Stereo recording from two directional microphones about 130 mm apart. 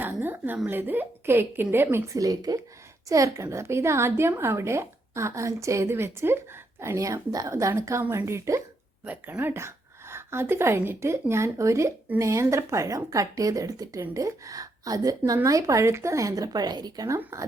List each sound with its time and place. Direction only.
0.0 s a woman's voice: 15° right (ahead or behind); by 17.2 s 30° right (ahead or behind)